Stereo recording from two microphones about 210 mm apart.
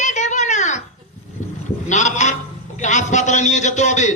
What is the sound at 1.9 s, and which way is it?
A man's voice, 35° left (ahead or behind).